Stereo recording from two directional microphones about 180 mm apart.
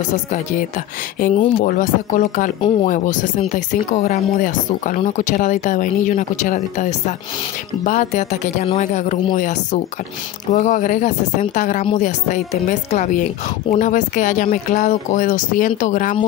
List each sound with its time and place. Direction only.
1.4 s speech: 45° left (ahead or behind)